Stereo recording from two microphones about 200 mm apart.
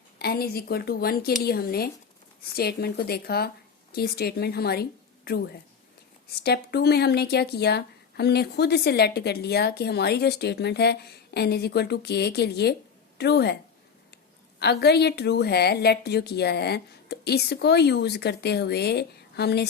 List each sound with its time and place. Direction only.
0.2 s a woman's voice: 50° left (ahead or behind)
14.6 s a woman's voice: 55° left (ahead or behind)